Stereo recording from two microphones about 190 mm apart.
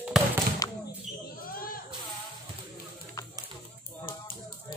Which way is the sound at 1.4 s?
50° left (ahead or behind).